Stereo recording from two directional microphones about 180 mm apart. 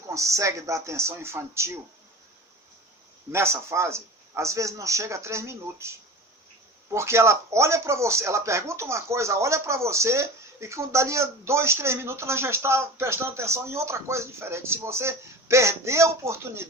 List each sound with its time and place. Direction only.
0.1 s speech: 15° right (ahead or behind)
3.3 s speech: 15° right (ahead or behind)